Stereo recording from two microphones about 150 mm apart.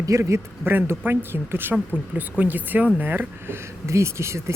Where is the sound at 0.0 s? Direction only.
20° right (ahead or behind).